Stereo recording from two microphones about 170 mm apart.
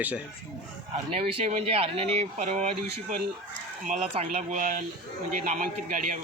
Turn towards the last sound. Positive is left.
turn(degrees=-50)  # may be behind; listen again after turning